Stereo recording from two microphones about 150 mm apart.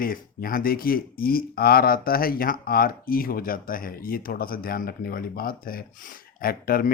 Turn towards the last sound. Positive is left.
turn(degrees=75)  # may be behind; listen again after turning